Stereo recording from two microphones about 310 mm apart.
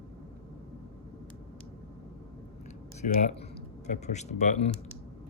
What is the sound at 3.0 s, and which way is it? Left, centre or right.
Speech, left.